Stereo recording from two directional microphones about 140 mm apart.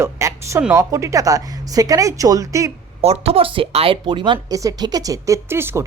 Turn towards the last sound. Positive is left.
turn(degrees=-15)  # may be behind; listen again after turning